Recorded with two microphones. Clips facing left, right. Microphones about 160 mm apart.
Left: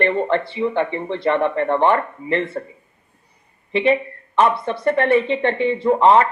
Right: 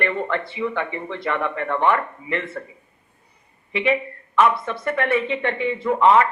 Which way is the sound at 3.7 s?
30° left (ahead or behind).